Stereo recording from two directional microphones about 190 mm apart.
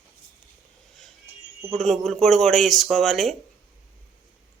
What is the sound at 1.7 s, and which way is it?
Speech, centre (ahead or behind).